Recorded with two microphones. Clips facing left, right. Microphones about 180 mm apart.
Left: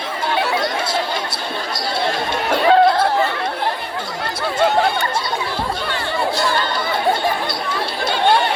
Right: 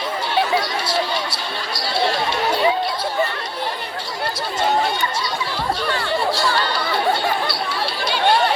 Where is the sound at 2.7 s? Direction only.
55° left (ahead or behind).